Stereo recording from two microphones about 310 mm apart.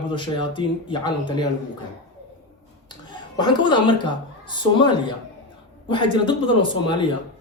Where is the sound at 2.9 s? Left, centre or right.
Centre.